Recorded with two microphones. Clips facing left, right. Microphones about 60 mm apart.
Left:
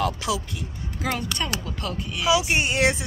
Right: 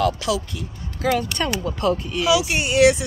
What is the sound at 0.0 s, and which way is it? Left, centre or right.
Speech, left.